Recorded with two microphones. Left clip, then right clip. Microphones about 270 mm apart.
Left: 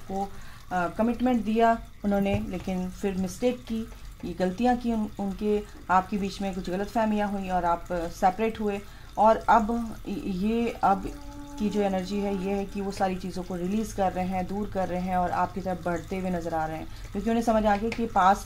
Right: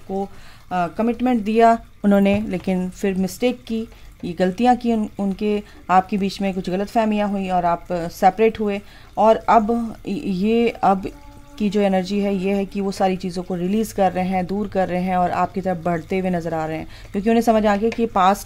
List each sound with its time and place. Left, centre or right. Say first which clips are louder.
0.7 s speech: right 6 dB; right